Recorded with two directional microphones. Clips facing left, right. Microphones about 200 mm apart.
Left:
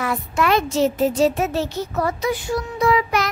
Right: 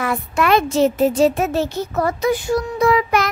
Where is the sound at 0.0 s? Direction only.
60° right (ahead or behind).